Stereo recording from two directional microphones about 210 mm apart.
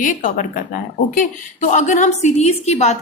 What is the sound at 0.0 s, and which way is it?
A woman's voice, 40° left (ahead or behind).